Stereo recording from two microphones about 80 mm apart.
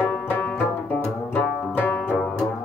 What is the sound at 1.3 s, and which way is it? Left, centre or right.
Music, left.